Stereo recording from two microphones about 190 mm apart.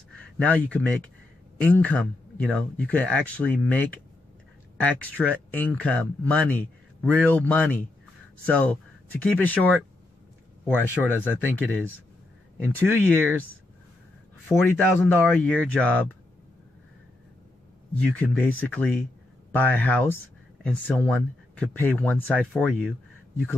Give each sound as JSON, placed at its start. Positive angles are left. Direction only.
{"t": 0.7, "sound": "speech", "side_deg": 5}
{"t": 13.0, "sound": "speech", "side_deg": 10}
{"t": 14.5, "sound": "speech", "side_deg": 15}
{"t": 18.2, "sound": "speech", "side_deg": 10}